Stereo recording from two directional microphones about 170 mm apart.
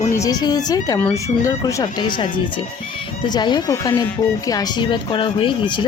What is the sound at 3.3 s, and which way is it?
Speech, 25° left (ahead or behind).